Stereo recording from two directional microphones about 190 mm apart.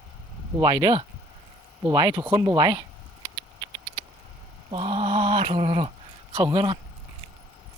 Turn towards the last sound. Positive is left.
turn(degrees=-30)  # may be behind; listen again after turning